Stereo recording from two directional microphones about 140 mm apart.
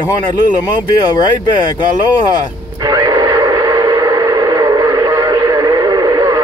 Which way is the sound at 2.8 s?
25° right (ahead or behind).